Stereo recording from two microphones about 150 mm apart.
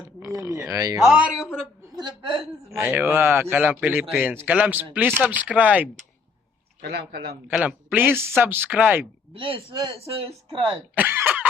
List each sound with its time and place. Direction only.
0.0 s speech: 25° right (ahead or behind)
1.0 s speech: 5° right (ahead or behind)
2.0 s a woman's voice: 30° right (ahead or behind)
2.8 s speech: 15° right (ahead or behind)
6.8 s speech: 90° right
7.5 s speech: 5° right (ahead or behind)
9.3 s a woman's voice: 35° right (ahead or behind)
10.7 s speech: 10° right (ahead or behind)